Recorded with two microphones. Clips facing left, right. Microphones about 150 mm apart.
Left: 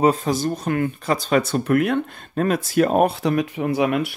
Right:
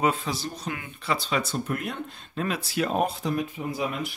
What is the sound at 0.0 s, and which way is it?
Speech, 40° left (ahead or behind).